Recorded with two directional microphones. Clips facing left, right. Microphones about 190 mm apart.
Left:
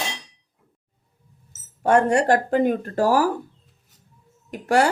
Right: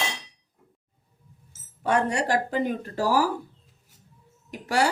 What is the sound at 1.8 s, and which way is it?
Speech, 50° left (ahead or behind).